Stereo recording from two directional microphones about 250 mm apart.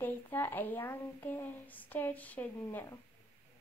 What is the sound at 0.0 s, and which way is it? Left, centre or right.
A woman's voice, centre.